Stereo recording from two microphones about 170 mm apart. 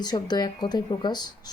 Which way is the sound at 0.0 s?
25° left (ahead or behind).